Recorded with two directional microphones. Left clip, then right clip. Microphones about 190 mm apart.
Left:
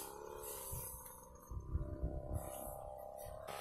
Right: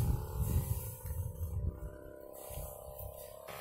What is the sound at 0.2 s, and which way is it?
Music, 15° right (ahead or behind).